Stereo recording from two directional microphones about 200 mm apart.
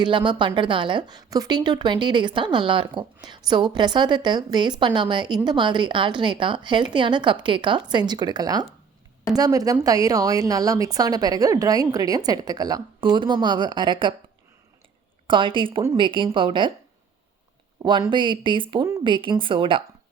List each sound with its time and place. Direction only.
0.0 s a woman's voice: 25° right (ahead or behind)
15.3 s a woman's voice: 25° right (ahead or behind)
17.8 s a woman's voice: 25° right (ahead or behind)